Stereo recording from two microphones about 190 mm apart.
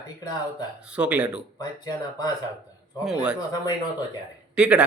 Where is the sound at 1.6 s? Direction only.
20° left (ahead or behind).